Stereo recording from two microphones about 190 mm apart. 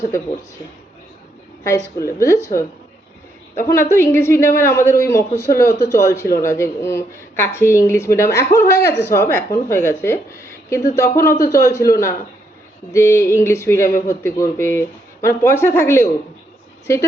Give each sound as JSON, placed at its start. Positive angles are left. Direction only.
{"t": 2.0, "sound": "speech", "side_deg": 15}
{"t": 3.8, "sound": "speech", "side_deg": 15}